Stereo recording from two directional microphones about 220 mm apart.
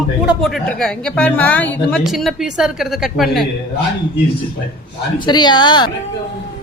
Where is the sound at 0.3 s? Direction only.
Centre (ahead or behind).